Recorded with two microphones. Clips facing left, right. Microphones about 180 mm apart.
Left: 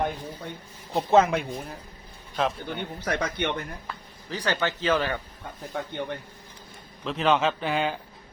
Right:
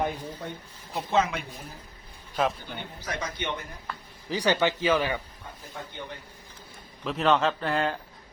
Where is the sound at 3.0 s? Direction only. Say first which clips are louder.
Left 6 dB; 60° left (ahead or behind).